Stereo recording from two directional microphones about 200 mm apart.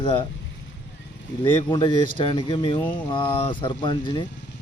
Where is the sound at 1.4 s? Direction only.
25° left (ahead or behind).